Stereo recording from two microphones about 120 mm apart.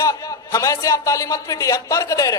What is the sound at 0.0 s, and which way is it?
Speech, 25° left (ahead or behind).